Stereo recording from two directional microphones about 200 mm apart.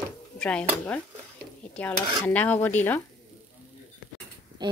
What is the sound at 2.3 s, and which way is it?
Cutlery, 10° left (ahead or behind).